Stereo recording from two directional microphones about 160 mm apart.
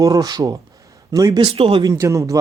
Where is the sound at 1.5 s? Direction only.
35° right (ahead or behind).